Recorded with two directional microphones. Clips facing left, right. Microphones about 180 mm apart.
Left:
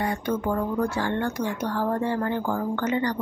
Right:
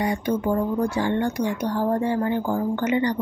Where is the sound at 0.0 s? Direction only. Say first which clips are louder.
Right 3 dB; 15° right (ahead or behind).